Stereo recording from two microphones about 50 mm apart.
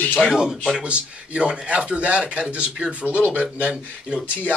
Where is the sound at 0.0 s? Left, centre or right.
Left.